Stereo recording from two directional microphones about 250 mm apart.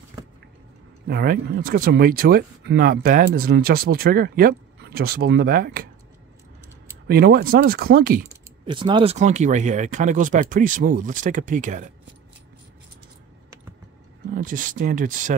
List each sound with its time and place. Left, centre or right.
1.0 s speech: right
7.1 s speech: right
8.6 s speech: centre
14.3 s speech: right